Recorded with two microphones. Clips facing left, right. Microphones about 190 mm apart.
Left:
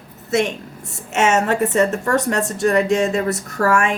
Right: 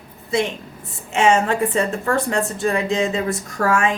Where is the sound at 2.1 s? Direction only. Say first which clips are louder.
Left 2 dB; 70° left (ahead or behind).